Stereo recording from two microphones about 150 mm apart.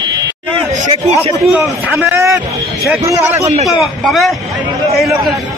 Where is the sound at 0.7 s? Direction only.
50° right (ahead or behind).